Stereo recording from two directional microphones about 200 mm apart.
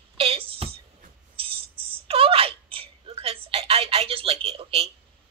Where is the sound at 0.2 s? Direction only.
30° right (ahead or behind).